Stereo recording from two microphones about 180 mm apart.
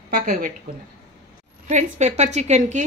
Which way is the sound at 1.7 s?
40° right (ahead or behind).